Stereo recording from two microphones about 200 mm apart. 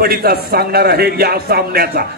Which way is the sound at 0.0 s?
50° right (ahead or behind).